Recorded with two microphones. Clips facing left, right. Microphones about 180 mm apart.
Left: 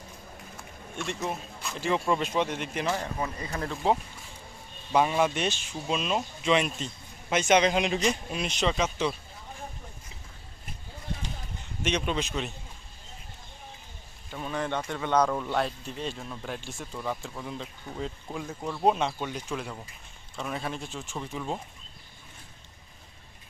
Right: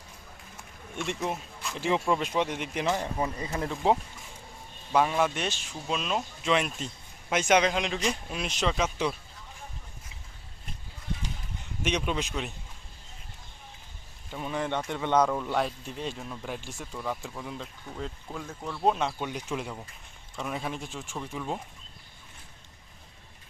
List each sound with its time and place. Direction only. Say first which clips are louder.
0.9 s speech: right 1 dB; 15° right (ahead or behind)
4.9 s speech: left 1 dB; 5° left (ahead or behind)
7.7 s speech: left 3 dB; 5° left (ahead or behind); by 9.1 s 10° right (ahead or behind)
11.8 s speech: left 1 dB; 10° right (ahead or behind)
14.4 s a man's voice: even; 15° right (ahead or behind)
15.2 s speech: even; 5° right (ahead or behind)
16.9 s speech: even; 5° left (ahead or behind)
18.9 s speech: left 1 dB; 5° right (ahead or behind)